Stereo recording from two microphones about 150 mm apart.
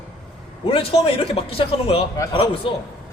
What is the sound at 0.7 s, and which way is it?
A man's voice, 40° left (ahead or behind).